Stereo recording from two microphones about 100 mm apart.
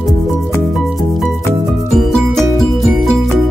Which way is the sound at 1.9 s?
5° left (ahead or behind).